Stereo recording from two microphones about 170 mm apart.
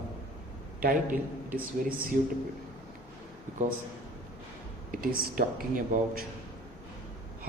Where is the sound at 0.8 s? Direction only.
55° right (ahead or behind).